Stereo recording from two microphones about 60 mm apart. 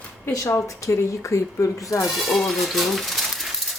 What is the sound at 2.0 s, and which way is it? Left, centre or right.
Speech, centre.